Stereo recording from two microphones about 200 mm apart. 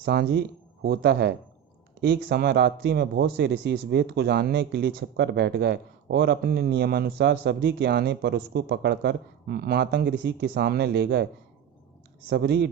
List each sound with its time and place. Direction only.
0.0 s speech: 55° right (ahead or behind)
12.3 s speech: 55° right (ahead or behind)